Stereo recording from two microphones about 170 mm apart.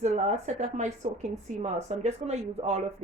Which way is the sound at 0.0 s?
45° right (ahead or behind).